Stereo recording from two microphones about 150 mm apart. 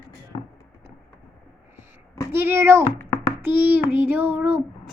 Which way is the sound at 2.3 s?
15° right (ahead or behind).